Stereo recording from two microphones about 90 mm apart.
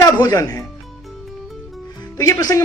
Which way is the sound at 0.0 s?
40° left (ahead or behind).